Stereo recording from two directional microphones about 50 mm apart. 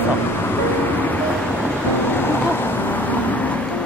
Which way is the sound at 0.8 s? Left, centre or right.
Left.